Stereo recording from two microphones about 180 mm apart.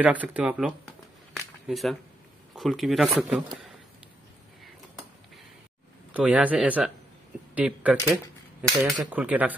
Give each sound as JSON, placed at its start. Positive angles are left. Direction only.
{"t": 0.0, "sound": "speech", "side_deg": -10}
{"t": 6.1, "sound": "speech", "side_deg": -5}